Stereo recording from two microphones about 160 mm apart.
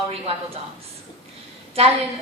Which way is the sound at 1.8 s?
40° right (ahead or behind).